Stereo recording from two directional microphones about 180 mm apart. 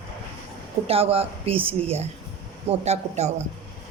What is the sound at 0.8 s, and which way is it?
A woman's voice, 35° right (ahead or behind).